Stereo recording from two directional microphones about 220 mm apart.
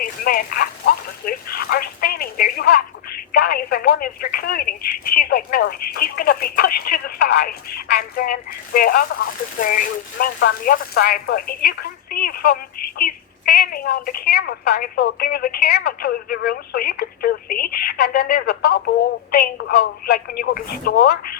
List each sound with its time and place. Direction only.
0.0 s speech: 40° left (ahead or behind)